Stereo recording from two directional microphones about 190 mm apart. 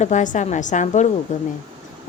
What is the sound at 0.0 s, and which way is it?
A woman's voice, 40° left (ahead or behind).